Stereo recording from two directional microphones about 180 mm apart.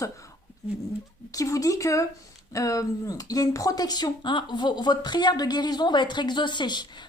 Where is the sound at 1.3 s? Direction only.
20° left (ahead or behind).